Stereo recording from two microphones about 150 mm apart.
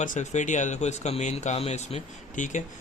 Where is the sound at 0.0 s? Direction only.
55° left (ahead or behind).